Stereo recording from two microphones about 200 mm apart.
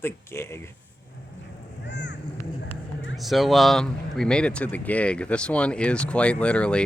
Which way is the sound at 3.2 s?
Centre (ahead or behind).